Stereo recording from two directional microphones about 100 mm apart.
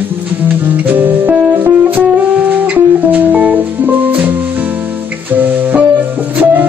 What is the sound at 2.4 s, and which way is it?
Music, 15° right (ahead or behind).